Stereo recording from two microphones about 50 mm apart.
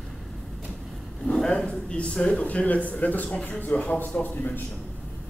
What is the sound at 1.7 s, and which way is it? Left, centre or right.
A man's voice, centre.